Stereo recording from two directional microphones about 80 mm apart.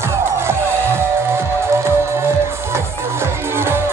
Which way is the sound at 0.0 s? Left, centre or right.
Right.